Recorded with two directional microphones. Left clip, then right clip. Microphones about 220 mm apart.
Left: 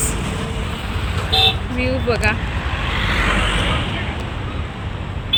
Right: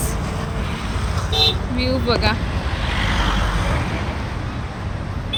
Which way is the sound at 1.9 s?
Centre (ahead or behind).